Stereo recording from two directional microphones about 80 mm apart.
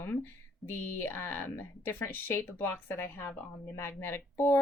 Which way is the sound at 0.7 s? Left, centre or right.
Left.